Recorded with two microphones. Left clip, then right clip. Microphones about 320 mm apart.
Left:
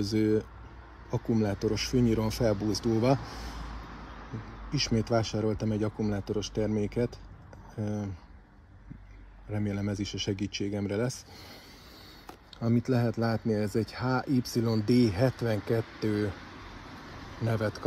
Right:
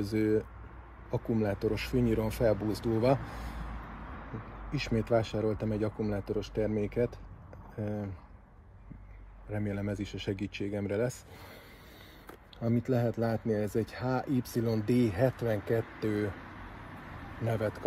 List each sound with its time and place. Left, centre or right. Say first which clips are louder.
0.0 s speech: left 2 dB; left
4.9 s speech: right 1 dB; left
9.5 s speech: left 1 dB; left
12.6 s speech: left 1 dB; left
17.5 s speech: left 1 dB; left